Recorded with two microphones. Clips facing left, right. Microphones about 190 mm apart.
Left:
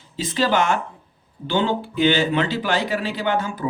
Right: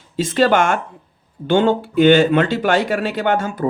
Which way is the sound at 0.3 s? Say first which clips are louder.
Right 4 dB; 55° right (ahead or behind).